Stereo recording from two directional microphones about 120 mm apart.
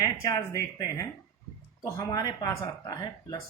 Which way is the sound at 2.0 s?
35° left (ahead or behind).